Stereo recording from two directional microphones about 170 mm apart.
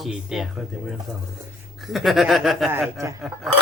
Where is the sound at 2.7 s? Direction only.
15° right (ahead or behind).